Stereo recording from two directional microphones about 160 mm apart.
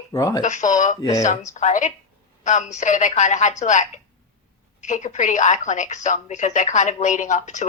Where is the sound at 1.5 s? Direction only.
50° left (ahead or behind).